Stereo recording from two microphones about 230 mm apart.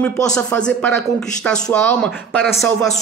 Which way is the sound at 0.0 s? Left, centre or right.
Centre.